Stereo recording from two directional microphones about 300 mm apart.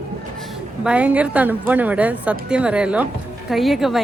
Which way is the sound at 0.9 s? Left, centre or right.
Centre.